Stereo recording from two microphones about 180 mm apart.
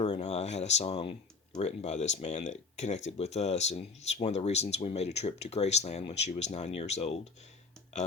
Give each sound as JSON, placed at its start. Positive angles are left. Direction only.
{"t": 0.0, "sound": "speech", "side_deg": 35}